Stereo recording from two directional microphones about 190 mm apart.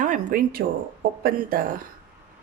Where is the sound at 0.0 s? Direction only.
45° right (ahead or behind).